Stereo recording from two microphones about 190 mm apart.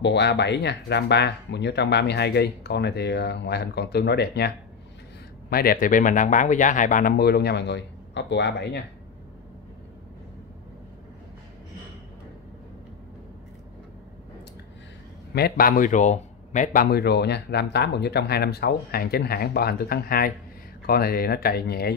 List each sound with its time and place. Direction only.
0.0 s speech: 60° left (ahead or behind)
5.5 s speech: 50° left (ahead or behind)
15.3 s speech: 50° left (ahead or behind)